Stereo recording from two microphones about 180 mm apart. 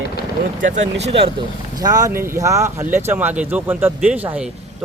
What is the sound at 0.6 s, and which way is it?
Speech, 35° right (ahead or behind).